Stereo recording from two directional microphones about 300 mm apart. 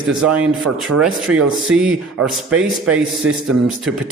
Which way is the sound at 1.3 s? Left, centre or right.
Right.